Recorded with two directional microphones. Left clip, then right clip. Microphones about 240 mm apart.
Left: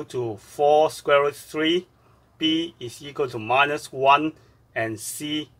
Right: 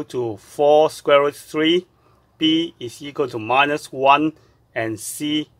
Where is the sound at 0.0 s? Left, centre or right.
Right.